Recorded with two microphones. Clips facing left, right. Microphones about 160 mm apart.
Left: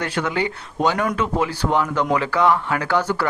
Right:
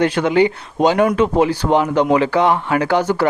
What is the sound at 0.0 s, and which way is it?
Speech, 20° right (ahead or behind).